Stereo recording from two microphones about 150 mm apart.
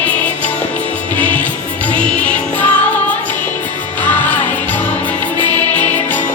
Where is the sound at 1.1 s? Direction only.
10° left (ahead or behind).